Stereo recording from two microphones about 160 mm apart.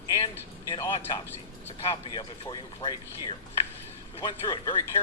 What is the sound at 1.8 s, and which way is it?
Speech, 30° left (ahead or behind).